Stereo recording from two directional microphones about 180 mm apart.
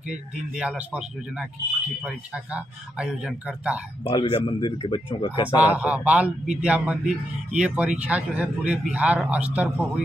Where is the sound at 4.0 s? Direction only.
25° left (ahead or behind).